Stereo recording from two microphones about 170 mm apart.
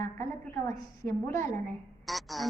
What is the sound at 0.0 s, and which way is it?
A woman's voice, 15° left (ahead or behind).